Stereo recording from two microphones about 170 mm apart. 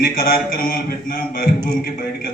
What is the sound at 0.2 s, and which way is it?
A man's voice, 60° left (ahead or behind).